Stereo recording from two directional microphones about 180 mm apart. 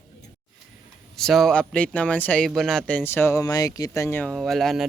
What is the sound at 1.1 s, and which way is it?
Speech, centre (ahead or behind).